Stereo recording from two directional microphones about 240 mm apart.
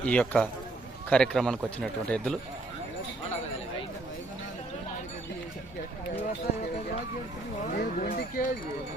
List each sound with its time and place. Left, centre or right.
0.0 s speech: centre
7.7 s speech: left